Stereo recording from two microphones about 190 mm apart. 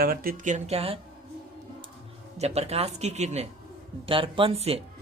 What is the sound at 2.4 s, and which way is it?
Speech, 35° right (ahead or behind).